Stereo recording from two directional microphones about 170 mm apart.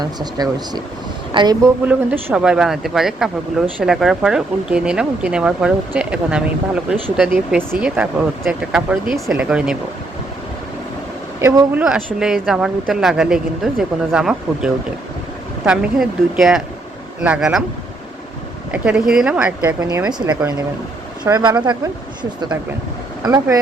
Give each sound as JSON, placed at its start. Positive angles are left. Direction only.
{"t": 0.0, "sound": "speech", "side_deg": -25}
{"t": 1.9, "sound": "speech", "side_deg": -10}
{"t": 11.3, "sound": "speech", "side_deg": -15}
{"t": 18.7, "sound": "speech", "side_deg": -5}
{"t": 21.2, "sound": "speech", "side_deg": -20}